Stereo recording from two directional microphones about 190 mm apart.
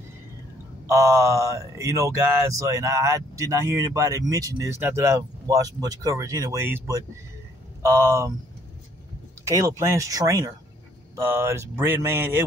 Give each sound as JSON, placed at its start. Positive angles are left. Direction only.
{"t": 0.8, "sound": "speech", "side_deg": -15}
{"t": 9.4, "sound": "speech", "side_deg": -15}